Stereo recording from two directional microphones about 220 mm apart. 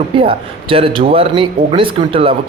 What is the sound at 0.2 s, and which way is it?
A man's voice, 25° right (ahead or behind).